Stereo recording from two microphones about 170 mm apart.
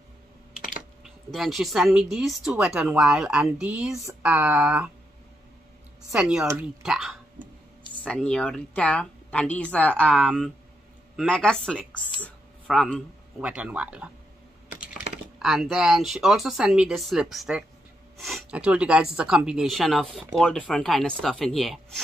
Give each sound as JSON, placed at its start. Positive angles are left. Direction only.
{"t": 1.0, "sound": "speech", "side_deg": 0}
{"t": 3.9, "sound": "speech", "side_deg": -20}
{"t": 6.1, "sound": "speech", "side_deg": -5}
{"t": 6.8, "sound": "speech", "side_deg": -5}